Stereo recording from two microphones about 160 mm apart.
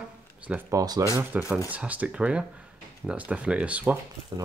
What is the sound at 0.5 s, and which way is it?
Speech, 15° right (ahead or behind).